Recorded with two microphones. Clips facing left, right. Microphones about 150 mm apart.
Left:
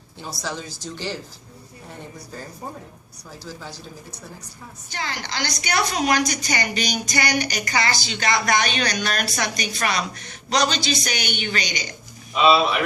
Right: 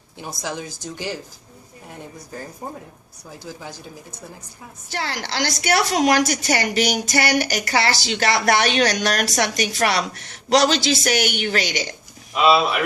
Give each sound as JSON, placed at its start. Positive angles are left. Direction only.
{"t": 0.2, "sound": "a woman's voice", "side_deg": -15}
{"t": 3.4, "sound": "a woman's voice", "side_deg": -20}
{"t": 4.9, "sound": "a woman's voice", "side_deg": -80}
{"t": 12.3, "sound": "speech", "side_deg": -5}